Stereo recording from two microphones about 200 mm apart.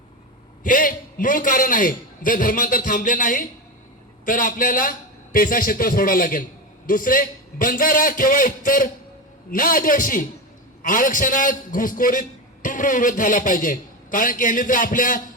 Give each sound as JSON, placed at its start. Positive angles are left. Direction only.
{"t": 0.6, "sound": "a man's voice", "side_deg": 45}